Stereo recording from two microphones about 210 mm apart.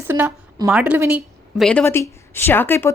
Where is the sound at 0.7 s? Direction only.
5° right (ahead or behind).